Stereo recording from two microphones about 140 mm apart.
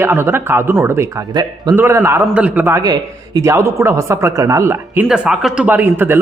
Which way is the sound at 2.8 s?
30° right (ahead or behind).